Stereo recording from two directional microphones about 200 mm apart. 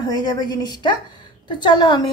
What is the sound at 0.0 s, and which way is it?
A woman's voice, 20° left (ahead or behind).